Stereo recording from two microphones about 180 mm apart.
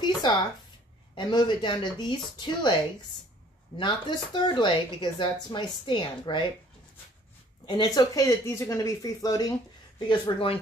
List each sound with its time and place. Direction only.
0.0 s a sound: 25° left (ahead or behind)
1.1 s a woman's voice: 25° left (ahead or behind)
3.7 s a woman's voice: 25° left (ahead or behind)
7.6 s a woman's voice: 25° left (ahead or behind)